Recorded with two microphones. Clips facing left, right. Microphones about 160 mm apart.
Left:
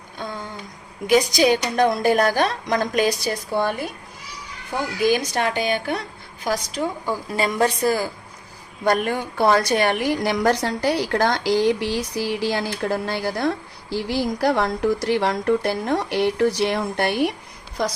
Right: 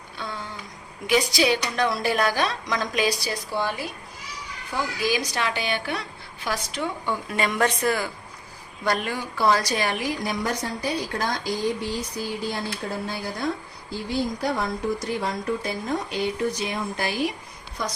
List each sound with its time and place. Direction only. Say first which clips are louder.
0.2 s a woman's voice: left 3 dB; 45° left (ahead or behind)
5.0 s a woman's voice: left 7 dB; 55° left (ahead or behind); by 8.1 s 35° left (ahead or behind)
8.8 s a woman's voice: left 5 dB; 50° left (ahead or behind)